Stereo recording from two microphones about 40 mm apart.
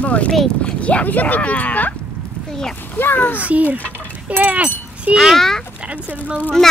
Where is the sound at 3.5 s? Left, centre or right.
Right.